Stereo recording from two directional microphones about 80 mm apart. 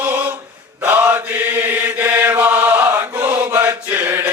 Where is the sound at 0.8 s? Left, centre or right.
Centre.